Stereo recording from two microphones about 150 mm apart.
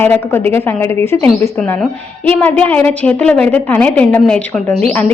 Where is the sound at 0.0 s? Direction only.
15° left (ahead or behind).